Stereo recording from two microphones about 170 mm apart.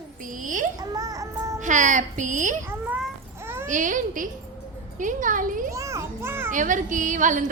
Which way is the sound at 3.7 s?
50° right (ahead or behind).